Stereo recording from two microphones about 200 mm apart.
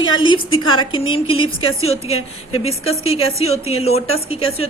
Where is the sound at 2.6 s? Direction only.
30° left (ahead or behind).